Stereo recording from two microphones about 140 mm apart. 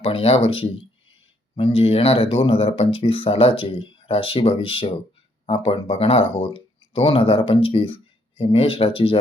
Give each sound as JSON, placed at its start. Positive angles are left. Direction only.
{"t": 0.0, "sound": "speech", "side_deg": 45}